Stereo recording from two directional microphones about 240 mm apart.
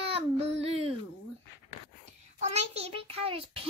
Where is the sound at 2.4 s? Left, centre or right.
Right.